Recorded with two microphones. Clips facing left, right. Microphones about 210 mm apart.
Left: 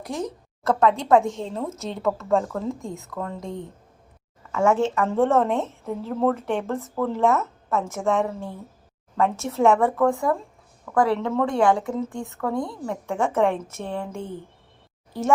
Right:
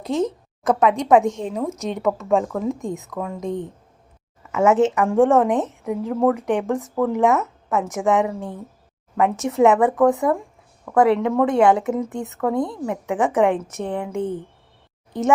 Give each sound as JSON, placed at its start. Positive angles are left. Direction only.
{"t": 0.0, "sound": "a woman's voice", "side_deg": -25}